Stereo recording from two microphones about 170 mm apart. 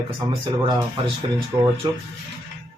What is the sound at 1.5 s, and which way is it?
Speech, 20° right (ahead or behind).